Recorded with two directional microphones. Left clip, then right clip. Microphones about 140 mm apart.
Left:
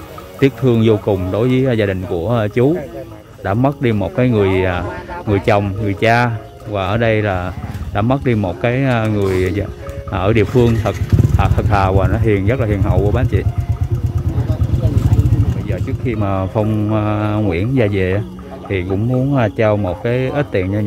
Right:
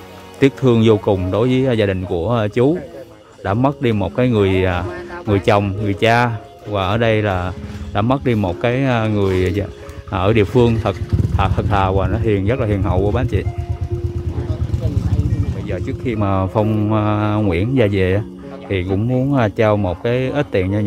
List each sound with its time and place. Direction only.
0.4 s speech: 40° right (ahead or behind)
11.7 s speech: 20° right (ahead or behind)
15.6 s speech: 35° right (ahead or behind)